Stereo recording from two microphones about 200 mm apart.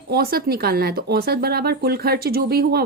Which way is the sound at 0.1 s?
50° right (ahead or behind).